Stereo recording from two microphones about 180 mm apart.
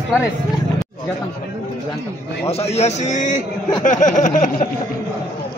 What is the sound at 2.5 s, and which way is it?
Speech, 35° left (ahead or behind).